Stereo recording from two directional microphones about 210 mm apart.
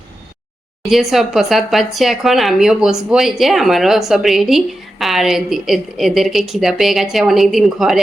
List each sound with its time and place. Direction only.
0.9 s speech: centre (ahead or behind)